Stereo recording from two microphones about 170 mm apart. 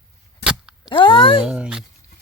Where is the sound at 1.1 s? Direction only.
30° left (ahead or behind).